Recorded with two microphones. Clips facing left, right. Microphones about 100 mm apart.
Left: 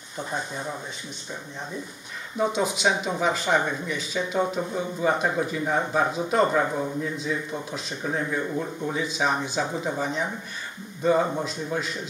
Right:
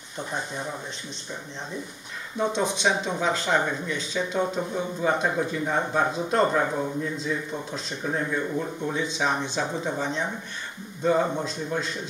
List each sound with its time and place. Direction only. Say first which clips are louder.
2.3 s speech: left 1 dB; 5° left (ahead or behind)